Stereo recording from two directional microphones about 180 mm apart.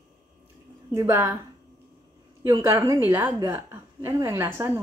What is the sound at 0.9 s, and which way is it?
Speech, 15° right (ahead or behind).